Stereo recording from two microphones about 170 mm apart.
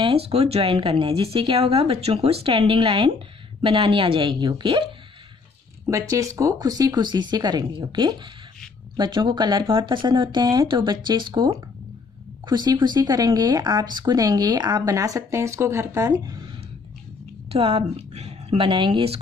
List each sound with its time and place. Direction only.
0.0 s speech: 35° right (ahead or behind)
5.9 s speech: 20° right (ahead or behind)
17.5 s a woman's voice: 35° right (ahead or behind)